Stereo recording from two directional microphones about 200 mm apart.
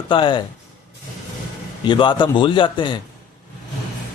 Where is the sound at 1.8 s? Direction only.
25° left (ahead or behind).